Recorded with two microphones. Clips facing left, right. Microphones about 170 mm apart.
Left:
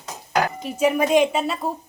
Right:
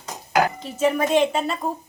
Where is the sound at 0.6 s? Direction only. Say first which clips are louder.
Left 1 dB; 10° left (ahead or behind).